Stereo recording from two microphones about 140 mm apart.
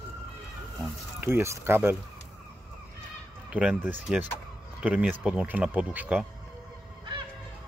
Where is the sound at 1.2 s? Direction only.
20° right (ahead or behind).